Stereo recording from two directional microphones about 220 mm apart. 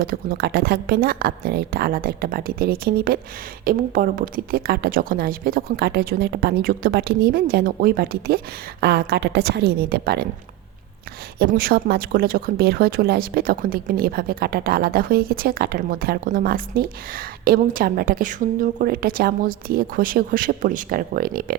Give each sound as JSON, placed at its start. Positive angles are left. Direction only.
{"t": 0.0, "sound": "a woman's voice", "side_deg": -40}
{"t": 11.3, "sound": "speech", "side_deg": -45}